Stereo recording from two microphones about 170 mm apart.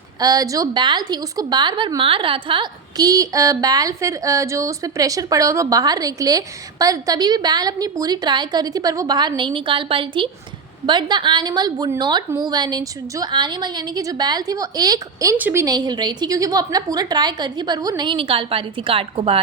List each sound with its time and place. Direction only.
0.2 s a woman's voice: 20° right (ahead or behind)